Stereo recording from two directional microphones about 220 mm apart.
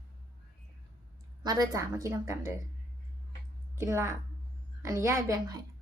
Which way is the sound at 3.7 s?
10° right (ahead or behind).